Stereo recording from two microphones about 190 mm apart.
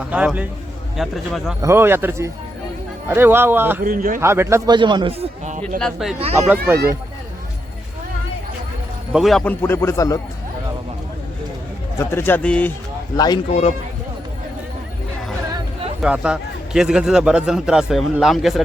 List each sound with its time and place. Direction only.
0.1 s a man's voice: 5° right (ahead or behind)
1.6 s a man's voice: 10° right (ahead or behind)
3.8 s a man's voice: 45° right (ahead or behind)
4.2 s speech: 15° right (ahead or behind)
5.8 s a man's voice: centre (ahead or behind)
6.1 s speech: 30° right (ahead or behind)
9.1 s a man's voice: centre (ahead or behind); by 10.2 s 15° left (ahead or behind)
11.9 s a man's voice: 15° left (ahead or behind)
13.1 s speech: 20° left (ahead or behind)
13.5 s speech: 35° left (ahead or behind)
16.0 s a man's voice: 5° right (ahead or behind)